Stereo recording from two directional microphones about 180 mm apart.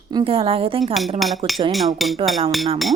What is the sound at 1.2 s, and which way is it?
Speech, centre (ahead or behind).